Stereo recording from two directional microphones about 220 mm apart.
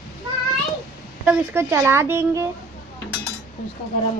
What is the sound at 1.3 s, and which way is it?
A woman's voice, 10° right (ahead or behind).